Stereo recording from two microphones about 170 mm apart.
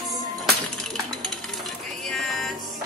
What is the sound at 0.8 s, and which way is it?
Music, centre (ahead or behind).